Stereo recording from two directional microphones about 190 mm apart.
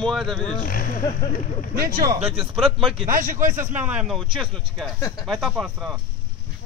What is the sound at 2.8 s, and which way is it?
Speech, 25° right (ahead or behind).